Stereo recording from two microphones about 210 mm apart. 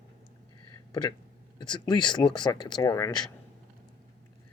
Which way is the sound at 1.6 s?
20° left (ahead or behind).